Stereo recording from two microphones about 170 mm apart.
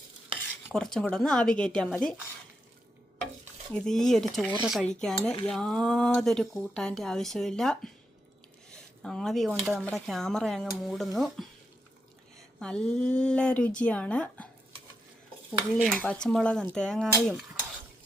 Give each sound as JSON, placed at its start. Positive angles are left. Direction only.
{"t": 0.7, "sound": "speech", "side_deg": 5}
{"t": 3.7, "sound": "speech", "side_deg": 5}
{"t": 9.0, "sound": "speech", "side_deg": 0}
{"t": 12.5, "sound": "speech", "side_deg": 5}
{"t": 15.8, "sound": "speech", "side_deg": 5}